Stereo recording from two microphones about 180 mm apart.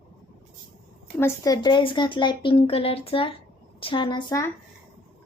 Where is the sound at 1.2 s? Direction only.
20° left (ahead or behind).